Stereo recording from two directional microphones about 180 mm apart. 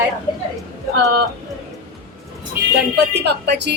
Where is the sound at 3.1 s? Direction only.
70° right (ahead or behind).